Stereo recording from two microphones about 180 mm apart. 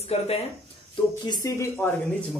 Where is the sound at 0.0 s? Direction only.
35° left (ahead or behind).